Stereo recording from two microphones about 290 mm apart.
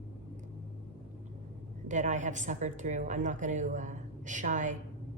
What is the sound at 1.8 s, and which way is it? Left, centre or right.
Speech, right.